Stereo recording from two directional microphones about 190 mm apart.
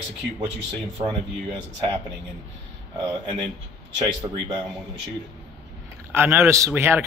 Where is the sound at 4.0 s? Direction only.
20° right (ahead or behind).